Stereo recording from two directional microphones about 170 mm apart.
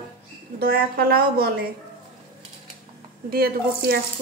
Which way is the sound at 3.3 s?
65° right (ahead or behind).